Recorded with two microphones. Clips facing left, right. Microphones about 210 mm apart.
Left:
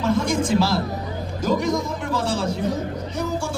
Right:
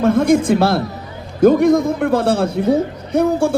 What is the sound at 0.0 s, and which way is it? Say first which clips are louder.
A man's voice: right 8 dB; 55° right (ahead or behind).